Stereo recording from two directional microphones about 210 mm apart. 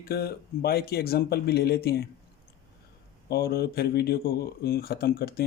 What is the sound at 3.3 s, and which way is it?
Speech, 50° left (ahead or behind).